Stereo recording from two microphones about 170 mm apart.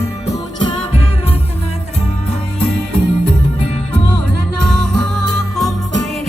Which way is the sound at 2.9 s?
35° left (ahead or behind).